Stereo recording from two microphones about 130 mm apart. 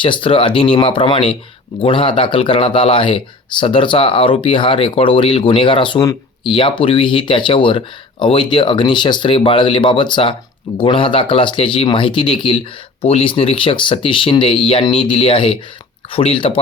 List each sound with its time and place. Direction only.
0.0 s speech: 40° left (ahead or behind)